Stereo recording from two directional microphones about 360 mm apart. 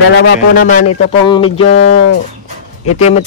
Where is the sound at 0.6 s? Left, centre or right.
Left.